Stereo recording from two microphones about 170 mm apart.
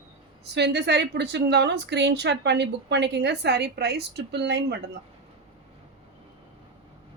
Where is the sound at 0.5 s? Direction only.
85° right.